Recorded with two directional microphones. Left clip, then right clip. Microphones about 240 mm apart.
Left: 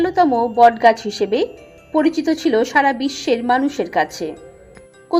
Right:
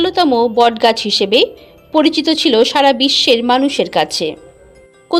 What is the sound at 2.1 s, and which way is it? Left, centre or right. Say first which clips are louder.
A woman's voice: right 5 dB; right.